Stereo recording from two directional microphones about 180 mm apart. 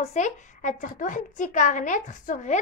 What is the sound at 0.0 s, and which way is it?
A woman's voice, 40° left (ahead or behind).